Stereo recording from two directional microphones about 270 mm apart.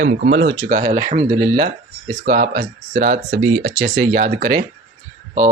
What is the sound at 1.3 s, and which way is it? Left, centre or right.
Speech, centre.